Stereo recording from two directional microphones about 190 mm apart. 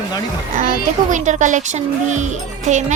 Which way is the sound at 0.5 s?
45° right (ahead or behind).